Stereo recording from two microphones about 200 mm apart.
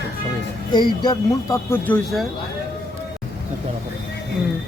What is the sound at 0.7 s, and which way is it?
Speech, 20° left (ahead or behind).